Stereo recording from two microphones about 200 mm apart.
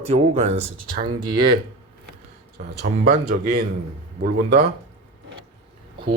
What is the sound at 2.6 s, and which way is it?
Speech, 40° right (ahead or behind).